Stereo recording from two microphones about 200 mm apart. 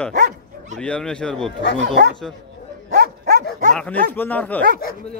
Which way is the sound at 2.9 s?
50° right (ahead or behind).